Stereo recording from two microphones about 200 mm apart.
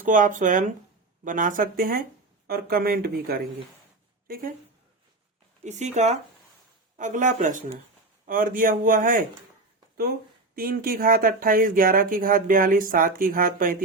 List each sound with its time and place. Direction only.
0.0 s speech: 40° right (ahead or behind)
5.6 s speech: 35° right (ahead or behind)
10.5 s speech: 45° right (ahead or behind)